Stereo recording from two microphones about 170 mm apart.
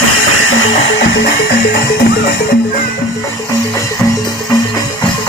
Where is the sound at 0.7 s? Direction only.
90° left; by 2.1 s 70° left (ahead or behind).